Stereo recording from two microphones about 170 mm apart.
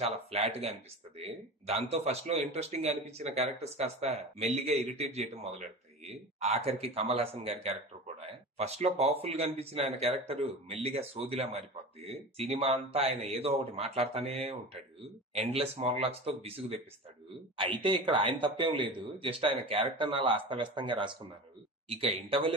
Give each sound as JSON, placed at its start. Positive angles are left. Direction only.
{"t": 0.0, "sound": "speech", "side_deg": -35}